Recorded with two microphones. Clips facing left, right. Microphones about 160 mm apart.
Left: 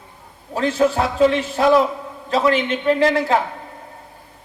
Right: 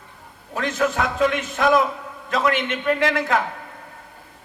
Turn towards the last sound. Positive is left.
turn(degrees=30)  # may be behind; listen again after turning